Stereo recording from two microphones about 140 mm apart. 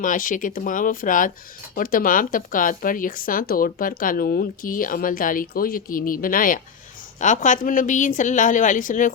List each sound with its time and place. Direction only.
0.0 s speech: 70° left (ahead or behind)
1.7 s speech: 90° left
7.2 s a woman's voice: 65° left (ahead or behind)